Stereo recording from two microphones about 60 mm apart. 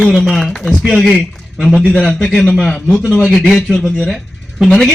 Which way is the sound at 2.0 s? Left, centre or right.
Centre.